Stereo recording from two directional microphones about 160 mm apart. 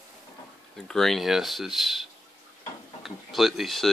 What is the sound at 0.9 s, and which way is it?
Speech, centre (ahead or behind).